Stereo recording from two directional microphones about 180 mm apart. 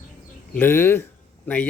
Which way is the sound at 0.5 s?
10° left (ahead or behind).